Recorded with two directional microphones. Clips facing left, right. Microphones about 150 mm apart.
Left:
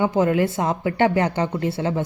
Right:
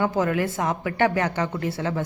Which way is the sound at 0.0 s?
25° left (ahead or behind).